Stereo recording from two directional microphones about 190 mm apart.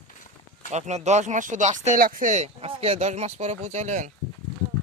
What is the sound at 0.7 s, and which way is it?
Speech, 35° right (ahead or behind).